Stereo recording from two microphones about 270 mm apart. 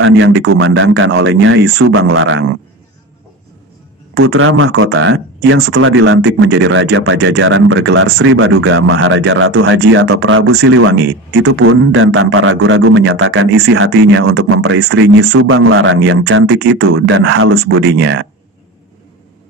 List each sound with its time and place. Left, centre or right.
0.0 s speech: right
4.2 s speech: right
15.3 s speech: right